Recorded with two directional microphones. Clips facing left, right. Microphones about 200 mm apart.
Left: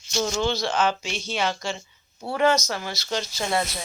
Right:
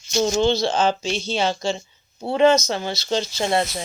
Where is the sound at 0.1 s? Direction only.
25° right (ahead or behind).